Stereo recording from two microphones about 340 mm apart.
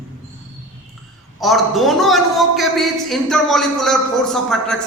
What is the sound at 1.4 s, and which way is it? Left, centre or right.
A man's voice, centre.